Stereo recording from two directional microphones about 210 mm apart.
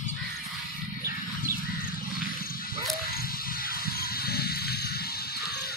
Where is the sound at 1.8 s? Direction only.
45° left (ahead or behind).